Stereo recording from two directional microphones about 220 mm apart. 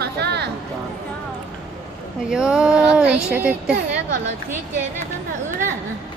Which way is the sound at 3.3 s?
5° right (ahead or behind).